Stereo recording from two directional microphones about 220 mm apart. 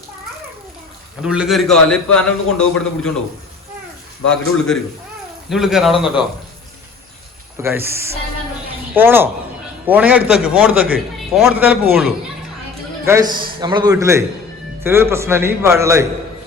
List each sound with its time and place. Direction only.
1.2 s a man's voice: 5° right (ahead or behind)
4.3 s a man's voice: 5° left (ahead or behind)
7.6 s a man's voice: 10° right (ahead or behind)
13.1 s a man's voice: 15° right (ahead or behind)